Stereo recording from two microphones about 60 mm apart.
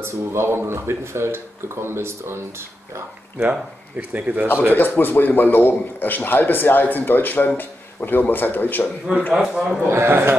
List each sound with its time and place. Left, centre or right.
0.0 s speech: right
4.1 s speech: right
4.6 s a man's voice: left
9.3 s a man's voice: centre
9.8 s speech: right